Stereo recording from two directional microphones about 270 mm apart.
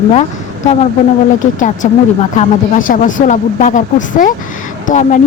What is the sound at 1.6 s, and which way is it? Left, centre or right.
A woman's voice, left.